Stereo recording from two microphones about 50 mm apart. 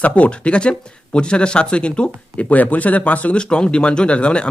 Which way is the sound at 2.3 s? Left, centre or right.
Left.